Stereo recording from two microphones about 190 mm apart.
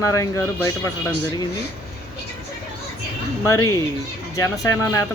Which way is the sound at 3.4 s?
15° left (ahead or behind).